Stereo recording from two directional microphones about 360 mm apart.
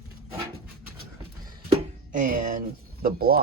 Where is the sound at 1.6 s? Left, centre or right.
Right.